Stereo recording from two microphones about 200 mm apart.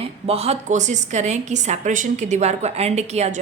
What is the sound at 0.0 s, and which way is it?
A woman's voice, 30° right (ahead or behind).